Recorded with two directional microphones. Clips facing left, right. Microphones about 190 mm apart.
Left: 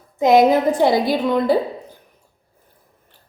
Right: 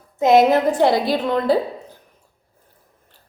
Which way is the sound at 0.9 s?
10° left (ahead or behind).